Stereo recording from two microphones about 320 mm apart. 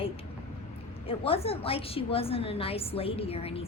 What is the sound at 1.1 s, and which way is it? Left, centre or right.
A woman's voice, centre.